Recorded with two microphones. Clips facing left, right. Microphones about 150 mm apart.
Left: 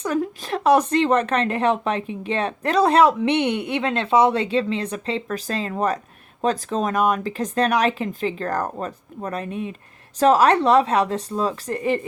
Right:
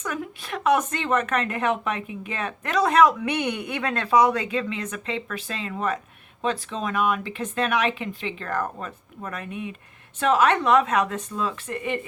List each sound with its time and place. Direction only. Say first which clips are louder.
0.0 s speech: left 8 dB; 35° left (ahead or behind)